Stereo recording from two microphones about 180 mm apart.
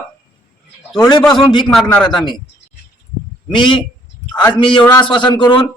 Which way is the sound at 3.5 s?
25° left (ahead or behind).